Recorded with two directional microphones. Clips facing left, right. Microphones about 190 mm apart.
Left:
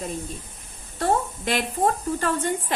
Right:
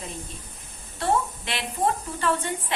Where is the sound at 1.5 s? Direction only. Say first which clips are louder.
Left 5 dB; 45° left (ahead or behind).